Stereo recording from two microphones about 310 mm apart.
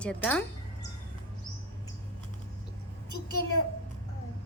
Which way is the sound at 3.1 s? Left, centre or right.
Left.